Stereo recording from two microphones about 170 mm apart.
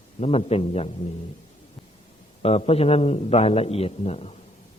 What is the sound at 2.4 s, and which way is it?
A man's voice, 35° left (ahead or behind).